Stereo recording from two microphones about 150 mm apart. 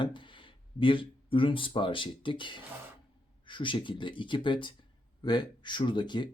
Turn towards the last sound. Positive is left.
turn(degrees=30)  # may be behind; listen again after turning